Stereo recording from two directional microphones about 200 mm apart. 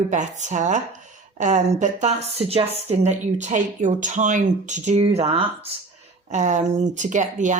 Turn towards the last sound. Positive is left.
turn(degrees=-40)  # may be behind; listen again after turning